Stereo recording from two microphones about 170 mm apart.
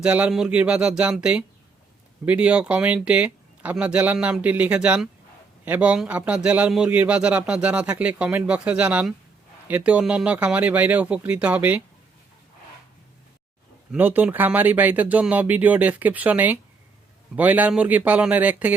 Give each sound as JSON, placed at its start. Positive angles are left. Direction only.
{"t": 0.0, "sound": "a man's voice", "side_deg": -5}
{"t": 13.9, "sound": "a man's voice", "side_deg": -10}